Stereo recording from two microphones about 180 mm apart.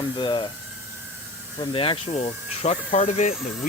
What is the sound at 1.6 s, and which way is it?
Speech, 30° left (ahead or behind).